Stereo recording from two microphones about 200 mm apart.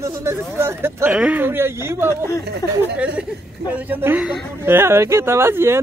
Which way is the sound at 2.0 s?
15° left (ahead or behind).